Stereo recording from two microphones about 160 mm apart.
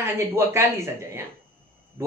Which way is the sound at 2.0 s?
15° right (ahead or behind).